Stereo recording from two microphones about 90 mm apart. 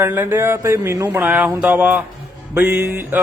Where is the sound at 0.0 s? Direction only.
25° right (ahead or behind).